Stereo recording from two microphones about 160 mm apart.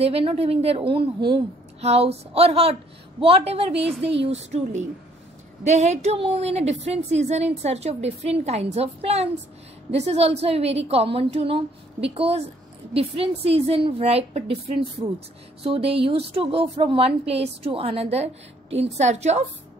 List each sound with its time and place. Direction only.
0.0 s a woman's voice: 40° right (ahead or behind)
15.6 s speech: 35° right (ahead or behind)